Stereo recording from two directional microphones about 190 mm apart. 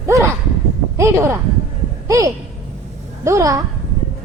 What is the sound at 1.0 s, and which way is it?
A woman's voice, 15° right (ahead or behind).